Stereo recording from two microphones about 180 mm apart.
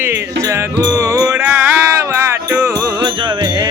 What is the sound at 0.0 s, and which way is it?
Music, 15° right (ahead or behind).